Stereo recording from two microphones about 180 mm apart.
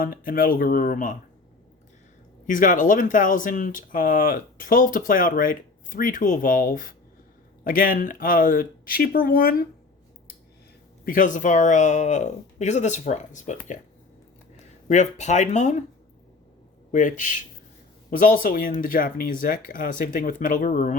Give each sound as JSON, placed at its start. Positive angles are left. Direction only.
{"t": 0.0, "sound": "speech", "side_deg": 50}
{"t": 2.5, "sound": "speech", "side_deg": 45}
{"t": 11.0, "sound": "speech", "side_deg": 50}
{"t": 14.8, "sound": "speech", "side_deg": 40}
{"t": 16.9, "sound": "speech", "side_deg": 45}